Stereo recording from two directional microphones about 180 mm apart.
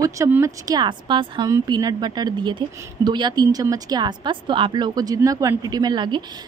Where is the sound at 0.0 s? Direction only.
15° right (ahead or behind).